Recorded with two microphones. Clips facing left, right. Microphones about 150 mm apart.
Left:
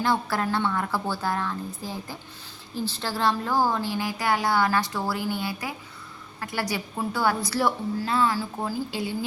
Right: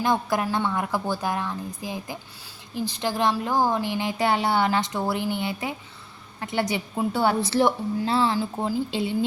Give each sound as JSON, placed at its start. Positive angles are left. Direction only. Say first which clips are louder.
{"t": 0.0, "sound": "a woman's voice", "louder": "right 2 dB", "side_deg": -15}